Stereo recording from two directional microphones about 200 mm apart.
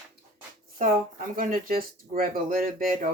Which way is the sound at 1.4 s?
45° right (ahead or behind).